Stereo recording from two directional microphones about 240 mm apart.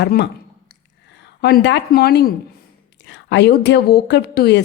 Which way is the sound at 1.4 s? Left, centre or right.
Left.